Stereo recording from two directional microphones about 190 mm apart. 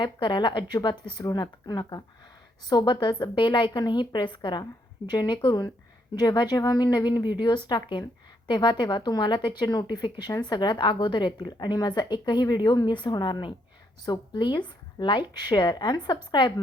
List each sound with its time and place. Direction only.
0.0 s speech: 25° left (ahead or behind)